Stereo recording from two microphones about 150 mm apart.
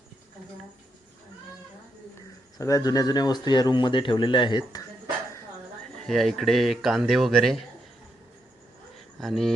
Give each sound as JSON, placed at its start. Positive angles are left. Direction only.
{"t": 2.6, "sound": "a man's voice", "side_deg": 20}
{"t": 6.1, "sound": "speech", "side_deg": 0}
{"t": 9.2, "sound": "speech", "side_deg": 0}